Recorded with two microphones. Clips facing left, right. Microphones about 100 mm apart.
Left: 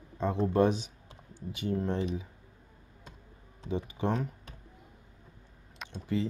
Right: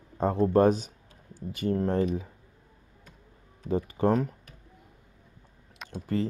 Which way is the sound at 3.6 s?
45° right (ahead or behind).